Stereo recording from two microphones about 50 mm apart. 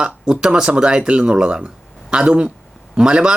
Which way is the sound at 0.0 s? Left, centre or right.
Centre.